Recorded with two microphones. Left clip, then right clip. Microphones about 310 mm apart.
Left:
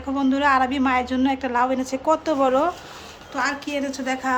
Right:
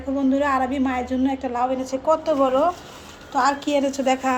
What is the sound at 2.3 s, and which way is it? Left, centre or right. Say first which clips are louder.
Speech: even; left.